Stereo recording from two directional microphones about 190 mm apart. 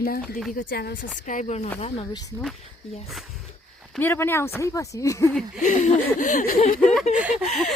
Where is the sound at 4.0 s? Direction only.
10° left (ahead or behind).